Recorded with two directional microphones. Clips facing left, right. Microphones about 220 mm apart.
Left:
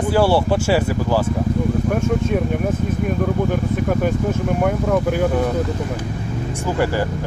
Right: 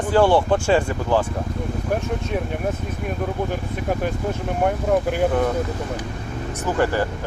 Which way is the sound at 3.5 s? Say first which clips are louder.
Left 5 dB; 50° left (ahead or behind).